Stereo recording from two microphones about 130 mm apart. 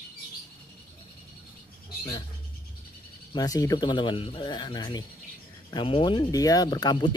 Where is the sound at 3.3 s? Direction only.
30° left (ahead or behind).